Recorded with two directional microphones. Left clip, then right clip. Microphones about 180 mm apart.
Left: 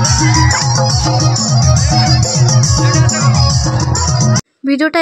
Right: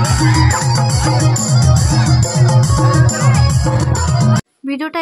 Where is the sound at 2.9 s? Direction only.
30° right (ahead or behind).